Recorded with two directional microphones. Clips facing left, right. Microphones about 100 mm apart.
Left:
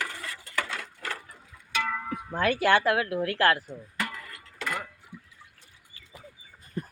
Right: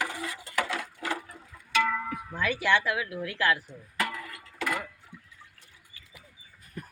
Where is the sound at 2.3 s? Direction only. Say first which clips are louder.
Left 4 dB; 50° left (ahead or behind).